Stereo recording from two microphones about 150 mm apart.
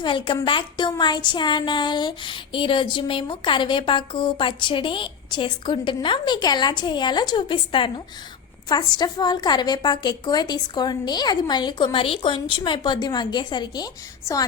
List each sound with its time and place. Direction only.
0.0 s a woman's voice: 35° left (ahead or behind)